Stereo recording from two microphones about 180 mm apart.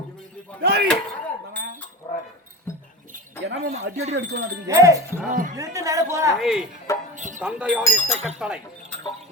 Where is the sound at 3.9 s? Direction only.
70° right (ahead or behind).